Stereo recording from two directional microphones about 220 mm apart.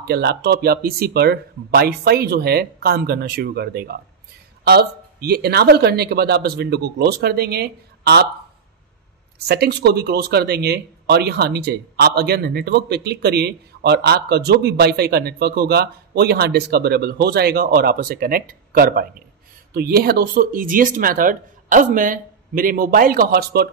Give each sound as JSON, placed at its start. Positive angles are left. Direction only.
{"t": 0.0, "sound": "speech", "side_deg": -45}
{"t": 9.5, "sound": "speech", "side_deg": -50}